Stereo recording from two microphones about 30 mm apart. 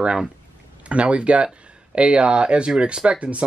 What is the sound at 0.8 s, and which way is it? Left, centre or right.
Speech, right.